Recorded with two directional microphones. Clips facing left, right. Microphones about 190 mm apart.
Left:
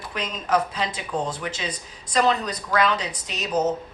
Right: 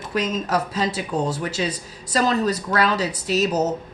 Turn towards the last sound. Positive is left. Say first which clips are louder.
# right 10 dB
turn(degrees=-40)  # may be behind; listen again after turning